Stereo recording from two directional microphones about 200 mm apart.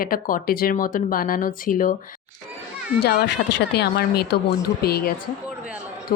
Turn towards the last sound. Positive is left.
turn(degrees=50)  # may be behind; listen again after turning